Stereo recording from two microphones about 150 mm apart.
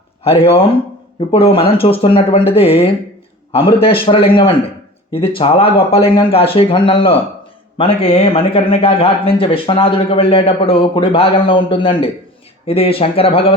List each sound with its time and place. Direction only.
1.3 s speech: 40° left (ahead or behind)